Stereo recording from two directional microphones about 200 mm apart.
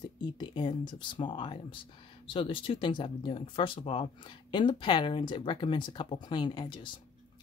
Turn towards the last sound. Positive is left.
turn(degrees=25)  # may be behind; listen again after turning